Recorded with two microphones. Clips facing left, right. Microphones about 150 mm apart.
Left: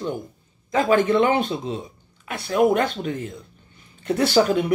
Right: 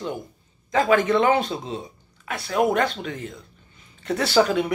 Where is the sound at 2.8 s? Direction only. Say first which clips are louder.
Left 1 dB; 45° left (ahead or behind).